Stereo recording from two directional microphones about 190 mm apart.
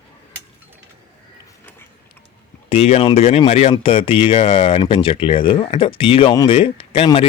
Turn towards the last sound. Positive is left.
turn(degrees=30)  # may be behind; listen again after turning